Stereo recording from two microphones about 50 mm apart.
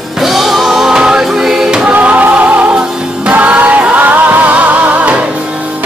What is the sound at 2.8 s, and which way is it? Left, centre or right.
Music, centre.